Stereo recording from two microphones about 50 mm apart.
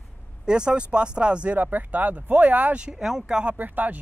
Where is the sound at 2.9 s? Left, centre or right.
Centre.